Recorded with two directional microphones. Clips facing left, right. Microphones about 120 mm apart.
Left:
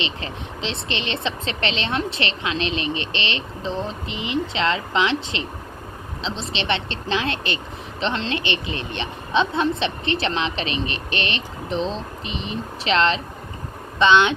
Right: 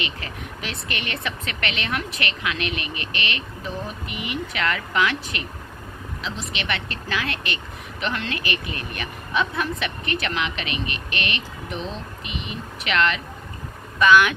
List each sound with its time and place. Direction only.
0.0 s speech: 25° left (ahead or behind)